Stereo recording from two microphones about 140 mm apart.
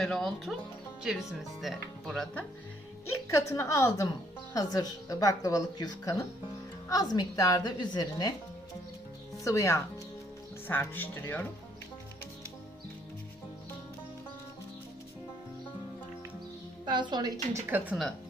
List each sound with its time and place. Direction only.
0.0 s speech: centre (ahead or behind)
3.1 s a woman's voice: 20° left (ahead or behind)
9.4 s a woman's voice: 20° left (ahead or behind)
16.8 s a woman's voice: 30° right (ahead or behind); by 17.9 s 15° right (ahead or behind)